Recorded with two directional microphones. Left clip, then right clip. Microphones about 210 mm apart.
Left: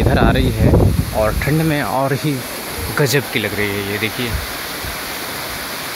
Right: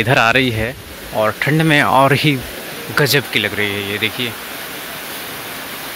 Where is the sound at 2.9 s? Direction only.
Centre (ahead or behind).